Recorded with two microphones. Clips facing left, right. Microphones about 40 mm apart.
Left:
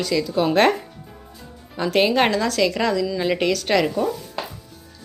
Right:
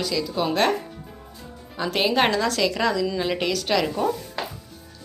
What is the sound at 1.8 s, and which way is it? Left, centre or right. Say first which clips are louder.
A woman's voice: left 3 dB; centre.